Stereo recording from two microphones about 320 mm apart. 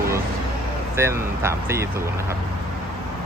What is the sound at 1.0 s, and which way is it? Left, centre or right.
Speech, centre.